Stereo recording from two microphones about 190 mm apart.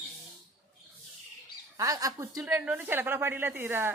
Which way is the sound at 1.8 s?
20° right (ahead or behind).